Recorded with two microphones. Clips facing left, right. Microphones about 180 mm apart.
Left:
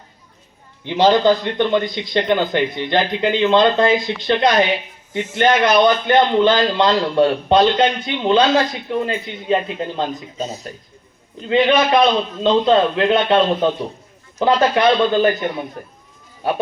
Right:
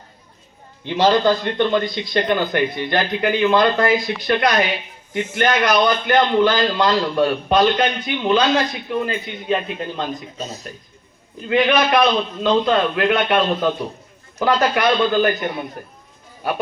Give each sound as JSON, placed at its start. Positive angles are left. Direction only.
{"t": 0.9, "sound": "a man's voice", "side_deg": 15}